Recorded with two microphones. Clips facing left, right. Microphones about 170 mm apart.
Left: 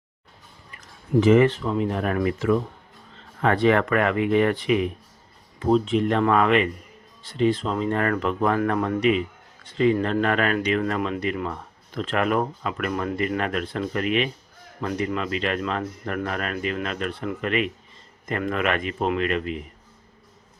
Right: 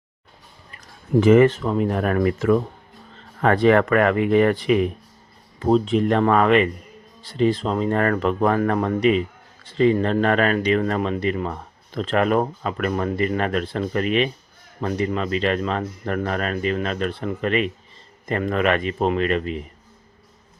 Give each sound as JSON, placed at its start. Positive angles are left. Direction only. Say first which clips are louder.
{"t": 1.2, "sound": "speech", "louder": "right 3 dB", "side_deg": -50}